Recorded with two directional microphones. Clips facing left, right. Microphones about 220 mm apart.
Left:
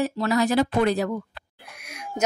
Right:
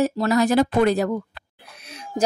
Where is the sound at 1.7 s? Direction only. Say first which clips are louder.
Right 4 dB; 30° right (ahead or behind).